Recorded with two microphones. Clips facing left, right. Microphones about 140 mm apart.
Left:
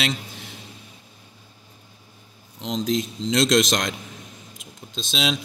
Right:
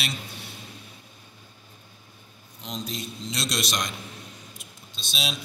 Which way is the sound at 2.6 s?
90° left.